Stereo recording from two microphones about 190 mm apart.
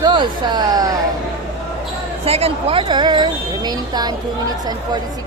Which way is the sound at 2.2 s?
30° right (ahead or behind).